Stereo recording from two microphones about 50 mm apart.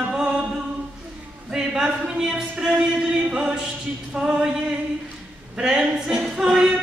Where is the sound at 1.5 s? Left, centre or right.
Centre.